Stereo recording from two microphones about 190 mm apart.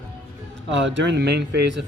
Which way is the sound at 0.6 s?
70° right (ahead or behind).